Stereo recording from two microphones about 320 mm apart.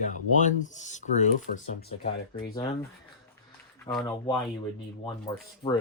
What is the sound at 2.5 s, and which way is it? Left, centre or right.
Speech, centre.